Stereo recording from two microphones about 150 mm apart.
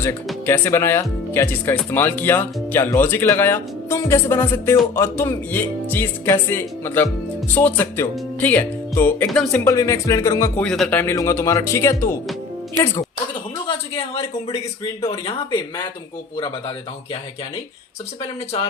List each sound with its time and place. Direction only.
0.4 s speech: 15° left (ahead or behind)
10.6 s speech: 5° left (ahead or behind)
11.1 s speech: 20° left (ahead or behind)
13.7 s speech: 35° left (ahead or behind)